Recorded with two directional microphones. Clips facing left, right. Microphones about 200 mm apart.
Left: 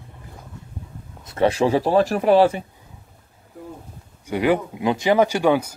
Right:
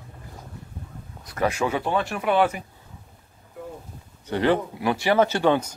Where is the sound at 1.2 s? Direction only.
25° left (ahead or behind).